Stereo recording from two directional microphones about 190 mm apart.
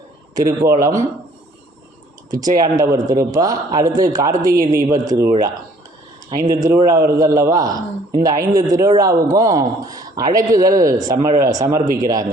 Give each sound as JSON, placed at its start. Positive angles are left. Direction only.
{"t": 0.3, "sound": "a man's voice", "side_deg": -15}
{"t": 2.3, "sound": "a man's voice", "side_deg": -20}
{"t": 6.5, "sound": "a man's voice", "side_deg": -15}